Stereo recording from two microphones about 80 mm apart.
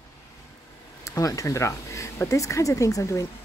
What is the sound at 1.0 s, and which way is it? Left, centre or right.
Speech, left.